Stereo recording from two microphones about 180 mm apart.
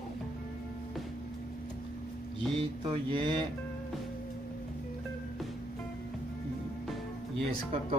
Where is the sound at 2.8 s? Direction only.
25° right (ahead or behind).